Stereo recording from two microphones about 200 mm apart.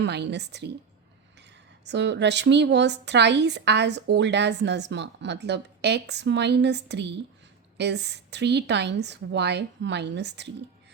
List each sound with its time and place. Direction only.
0.0 s speech: 60° right (ahead or behind)